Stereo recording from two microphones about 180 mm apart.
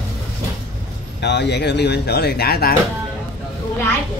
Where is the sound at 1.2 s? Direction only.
70° left (ahead or behind).